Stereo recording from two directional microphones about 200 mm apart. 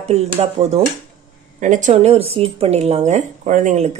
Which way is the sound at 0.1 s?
30° right (ahead or behind).